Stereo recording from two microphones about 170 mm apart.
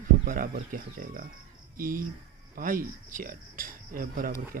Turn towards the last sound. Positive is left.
turn(degrees=-55)  # may be behind; listen again after turning